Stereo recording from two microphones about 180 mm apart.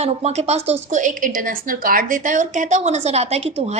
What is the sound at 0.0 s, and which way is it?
A woman's voice, 35° right (ahead or behind).